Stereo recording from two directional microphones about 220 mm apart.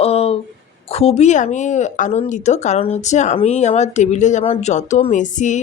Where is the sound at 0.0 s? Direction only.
25° left (ahead or behind).